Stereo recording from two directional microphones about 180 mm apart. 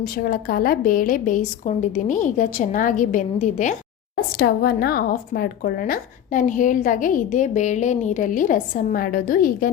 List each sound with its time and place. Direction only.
0.0 s speech: 55° left (ahead or behind)
4.1 s speech: 60° left (ahead or behind)